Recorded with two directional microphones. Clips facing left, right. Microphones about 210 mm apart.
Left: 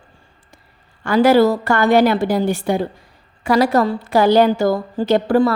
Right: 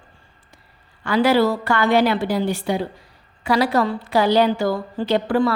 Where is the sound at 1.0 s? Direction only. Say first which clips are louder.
Left 4 dB; 45° left (ahead or behind).